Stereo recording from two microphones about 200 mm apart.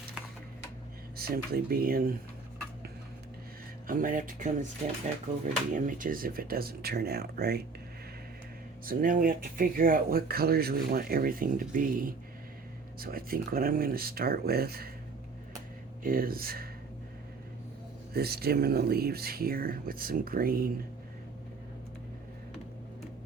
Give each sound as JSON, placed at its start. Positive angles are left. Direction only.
{"t": 1.1, "sound": "speech", "side_deg": -50}
{"t": 3.8, "sound": "speech", "side_deg": -45}
{"t": 5.7, "sound": "speech", "side_deg": -40}
{"t": 8.9, "sound": "speech", "side_deg": -45}
{"t": 16.0, "sound": "speech", "side_deg": -45}
{"t": 18.1, "sound": "speech", "side_deg": -50}